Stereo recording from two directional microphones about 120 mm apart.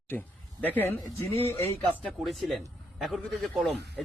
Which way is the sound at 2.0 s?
Centre (ahead or behind).